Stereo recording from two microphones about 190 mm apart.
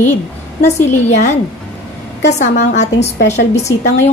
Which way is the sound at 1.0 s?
35° left (ahead or behind).